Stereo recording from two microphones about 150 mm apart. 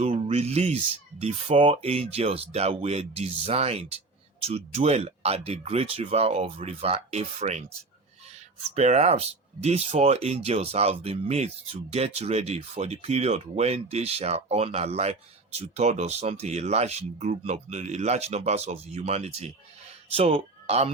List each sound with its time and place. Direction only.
0.0 s speech: 45° right (ahead or behind)
8.7 s speech: 45° right (ahead or behind)